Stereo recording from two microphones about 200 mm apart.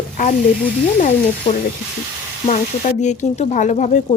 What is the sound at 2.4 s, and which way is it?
A woman's voice, 35° left (ahead or behind).